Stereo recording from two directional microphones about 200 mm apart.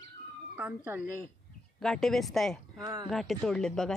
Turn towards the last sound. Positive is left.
turn(degrees=5)  # may be behind; listen again after turning